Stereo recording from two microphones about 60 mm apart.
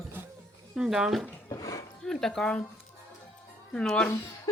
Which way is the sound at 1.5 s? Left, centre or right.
Left.